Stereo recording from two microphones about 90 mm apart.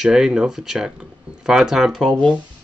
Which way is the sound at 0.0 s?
5° right (ahead or behind).